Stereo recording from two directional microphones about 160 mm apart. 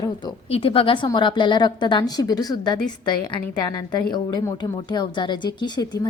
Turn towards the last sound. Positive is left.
turn(degrees=25)  # may be behind; listen again after turning